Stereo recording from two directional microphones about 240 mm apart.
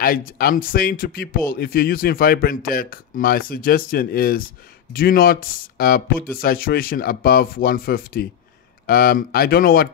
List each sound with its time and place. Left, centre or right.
0.0 s speech: left